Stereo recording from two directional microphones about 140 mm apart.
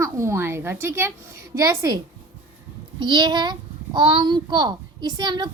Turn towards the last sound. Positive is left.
turn(degrees=-35)  # may be behind; listen again after turning